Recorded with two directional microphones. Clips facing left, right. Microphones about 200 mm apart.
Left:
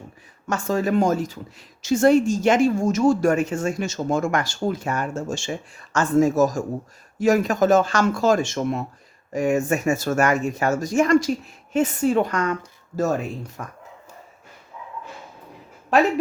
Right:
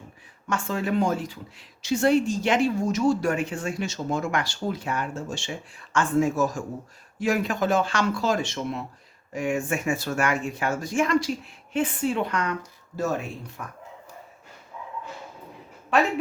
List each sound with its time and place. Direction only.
0.4 s speech: 40° left (ahead or behind)
13.6 s speech: 50° left (ahead or behind)